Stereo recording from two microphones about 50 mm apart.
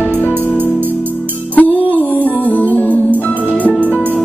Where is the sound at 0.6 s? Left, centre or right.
Right.